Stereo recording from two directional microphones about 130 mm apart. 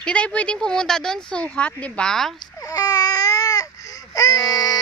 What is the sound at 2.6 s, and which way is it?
Baby cry, 30° left (ahead or behind).